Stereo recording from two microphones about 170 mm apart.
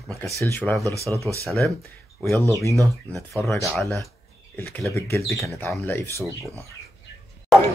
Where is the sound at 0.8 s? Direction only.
20° right (ahead or behind).